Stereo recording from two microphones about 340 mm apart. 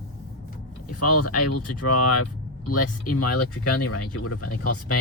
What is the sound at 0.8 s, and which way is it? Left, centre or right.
Speech, left.